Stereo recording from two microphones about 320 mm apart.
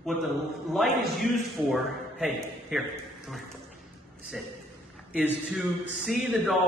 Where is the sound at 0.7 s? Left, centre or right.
Centre.